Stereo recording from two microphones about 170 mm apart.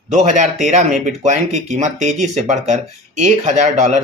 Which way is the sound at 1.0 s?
45° right (ahead or behind).